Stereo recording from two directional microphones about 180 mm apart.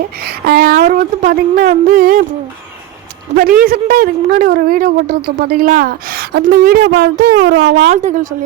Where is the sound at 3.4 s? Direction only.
55° right (ahead or behind).